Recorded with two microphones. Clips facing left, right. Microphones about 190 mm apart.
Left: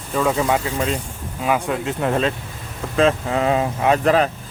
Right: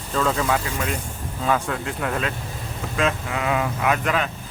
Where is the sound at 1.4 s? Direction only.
15° left (ahead or behind).